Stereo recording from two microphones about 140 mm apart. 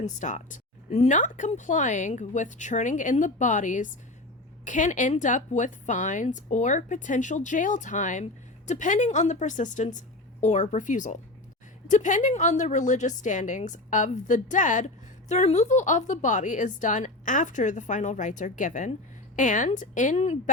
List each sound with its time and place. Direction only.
0.0 s speech: 60° left (ahead or behind)